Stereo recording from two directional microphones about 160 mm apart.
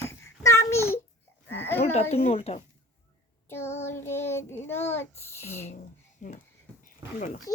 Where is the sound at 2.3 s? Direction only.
40° left (ahead or behind).